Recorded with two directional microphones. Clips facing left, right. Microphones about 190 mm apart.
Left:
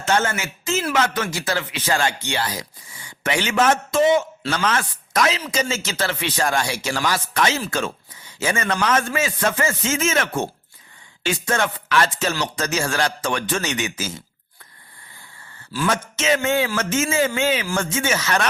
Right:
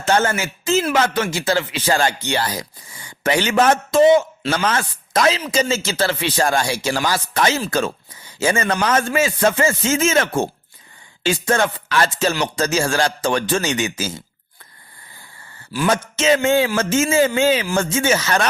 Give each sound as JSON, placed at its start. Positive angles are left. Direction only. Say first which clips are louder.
{"t": 0.0, "sound": "a man's voice", "louder": "right 3 dB", "side_deg": -35}
{"t": 15.9, "sound": "speech", "louder": "right 4 dB", "side_deg": -30}